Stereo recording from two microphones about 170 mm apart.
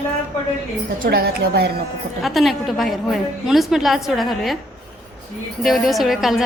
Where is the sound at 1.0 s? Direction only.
60° right (ahead or behind).